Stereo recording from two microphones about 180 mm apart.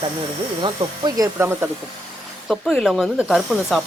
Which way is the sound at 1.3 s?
10° right (ahead or behind).